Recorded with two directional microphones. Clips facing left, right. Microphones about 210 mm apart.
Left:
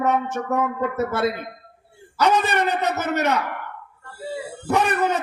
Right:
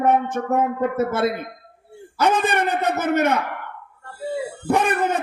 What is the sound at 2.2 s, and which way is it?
A man's voice, 50° right (ahead or behind).